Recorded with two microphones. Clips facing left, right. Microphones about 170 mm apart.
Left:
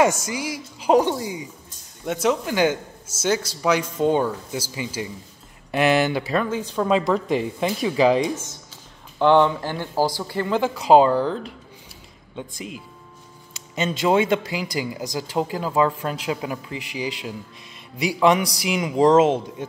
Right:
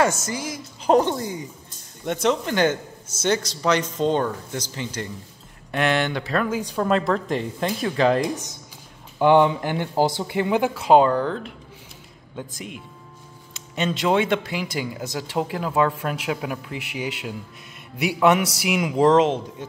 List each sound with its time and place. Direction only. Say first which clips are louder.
0.0 s a man's voice: left 2 dB; 15° left (ahead or behind)
6.5 s speech: even; 10° right (ahead or behind)
6.8 s speech: left 2 dB; centre (ahead or behind)
9.2 s speech: even; 15° right (ahead or behind)
10.7 s speech: left 3 dB; centre (ahead or behind)